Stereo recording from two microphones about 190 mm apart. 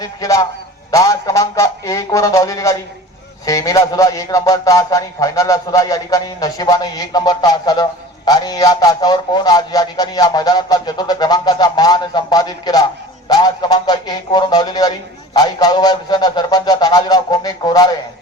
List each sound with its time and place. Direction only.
0.0 s a man's voice: 15° left (ahead or behind)